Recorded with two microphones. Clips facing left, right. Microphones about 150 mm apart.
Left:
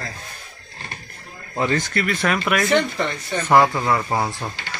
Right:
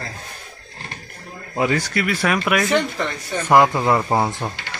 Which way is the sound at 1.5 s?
10° right (ahead or behind).